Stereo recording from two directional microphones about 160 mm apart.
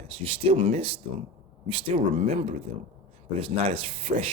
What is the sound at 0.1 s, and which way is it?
Speech, 35° right (ahead or behind).